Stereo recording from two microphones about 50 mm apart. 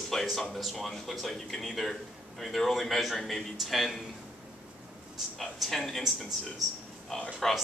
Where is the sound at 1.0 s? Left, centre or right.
Centre.